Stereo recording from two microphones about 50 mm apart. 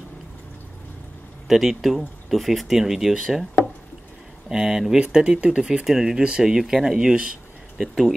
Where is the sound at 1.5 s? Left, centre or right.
Centre.